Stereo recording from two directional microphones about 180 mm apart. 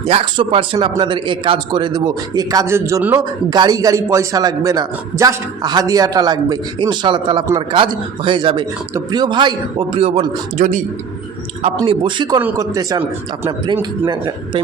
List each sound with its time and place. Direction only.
0.1 s a man's voice: 30° right (ahead or behind)
11.8 s a man's voice: 25° right (ahead or behind)
12.4 s a man's voice: 15° right (ahead or behind)